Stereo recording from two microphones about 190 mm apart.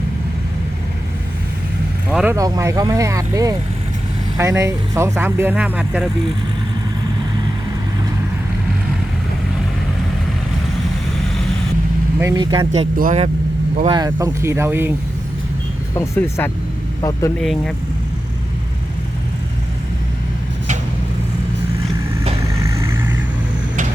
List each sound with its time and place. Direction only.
2.0 s vehicle: 5° right (ahead or behind)
2.3 s speech: 15° right (ahead or behind)
12.2 s speech: 20° right (ahead or behind); by 13.3 s 40° right (ahead or behind)
13.8 s speech: 20° right (ahead or behind)
16.0 s speech: 10° left (ahead or behind)
17.4 s speech: centre (ahead or behind)
22.6 s vehicle: 15° right (ahead or behind)